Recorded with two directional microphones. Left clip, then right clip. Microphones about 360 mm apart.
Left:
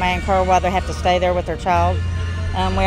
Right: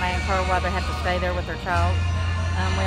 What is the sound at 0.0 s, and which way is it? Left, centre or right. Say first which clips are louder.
Speech: left 6 dB; left.